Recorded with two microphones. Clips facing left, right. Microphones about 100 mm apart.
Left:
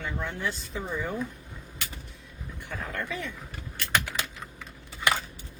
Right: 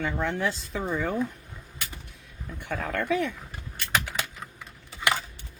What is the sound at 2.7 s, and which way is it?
Speech, 60° right (ahead or behind).